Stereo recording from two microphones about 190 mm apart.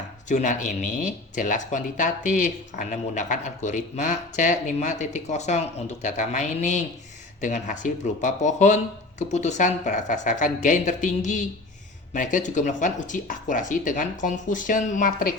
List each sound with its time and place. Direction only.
0.3 s speech: 40° left (ahead or behind)